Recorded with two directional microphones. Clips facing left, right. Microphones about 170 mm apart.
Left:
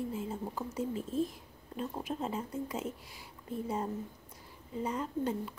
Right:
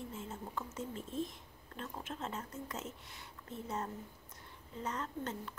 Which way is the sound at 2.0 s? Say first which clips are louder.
Left 5 dB; 10° left (ahead or behind).